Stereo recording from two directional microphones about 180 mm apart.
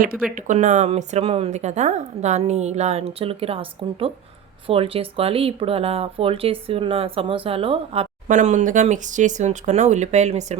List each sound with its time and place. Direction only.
0.3 s speech: 45° right (ahead or behind); by 8.0 s 30° right (ahead or behind)
8.3 s speech: 40° right (ahead or behind)